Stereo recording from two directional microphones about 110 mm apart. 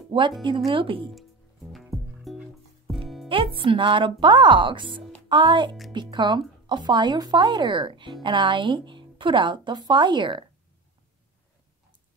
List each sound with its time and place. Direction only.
0.7 s speech: 50° right (ahead or behind)
1.7 s music: centre (ahead or behind)
3.3 s speech: 55° right (ahead or behind)